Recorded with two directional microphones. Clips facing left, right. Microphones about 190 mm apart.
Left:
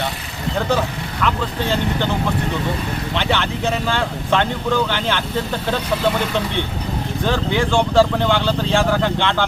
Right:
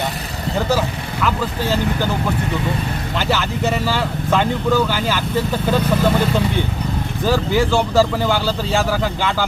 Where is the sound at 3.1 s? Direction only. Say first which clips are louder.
Right 1 dB; 5° right (ahead or behind).